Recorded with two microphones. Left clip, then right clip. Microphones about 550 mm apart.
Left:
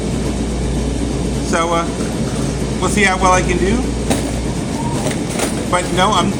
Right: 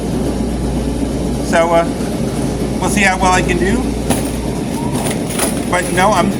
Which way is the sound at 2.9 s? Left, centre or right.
Right.